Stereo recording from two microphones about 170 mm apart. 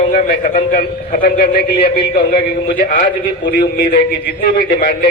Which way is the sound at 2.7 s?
50° left (ahead or behind).